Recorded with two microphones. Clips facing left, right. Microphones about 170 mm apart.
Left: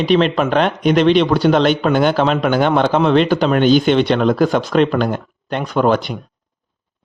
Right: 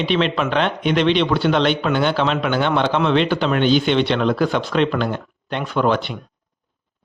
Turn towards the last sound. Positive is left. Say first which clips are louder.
# left 3 dB
turn(degrees=40)  # may be behind; listen again after turning